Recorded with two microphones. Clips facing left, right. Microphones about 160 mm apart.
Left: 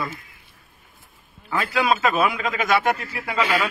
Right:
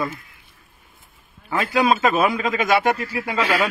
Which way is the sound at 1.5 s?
40° right (ahead or behind).